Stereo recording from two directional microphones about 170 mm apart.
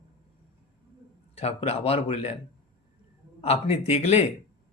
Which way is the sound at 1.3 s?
40° left (ahead or behind).